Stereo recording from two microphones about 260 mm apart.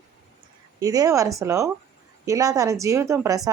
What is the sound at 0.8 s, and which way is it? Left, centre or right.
Speech, centre.